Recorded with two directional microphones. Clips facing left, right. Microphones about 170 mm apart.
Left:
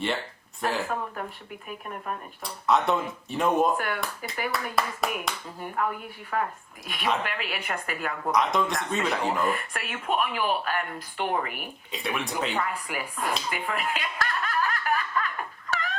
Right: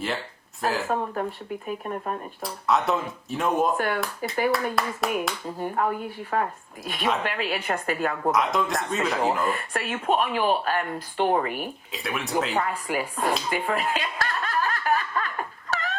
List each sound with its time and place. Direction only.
0.6 s speech: centre (ahead or behind)
1.6 s speech: 35° right (ahead or behind)
2.4 s speech: centre (ahead or behind)
3.8 s speech: 30° right (ahead or behind)
4.5 s speech: centre (ahead or behind)
5.5 s speech: 30° right (ahead or behind)
8.3 s speech: centre (ahead or behind)
9.5 s speech: 30° right (ahead or behind)
11.9 s speech: centre (ahead or behind)
12.5 s speech: 30° right (ahead or behind)
13.5 s snicker: 30° right (ahead or behind)
15.7 s a sound: 35° right (ahead or behind)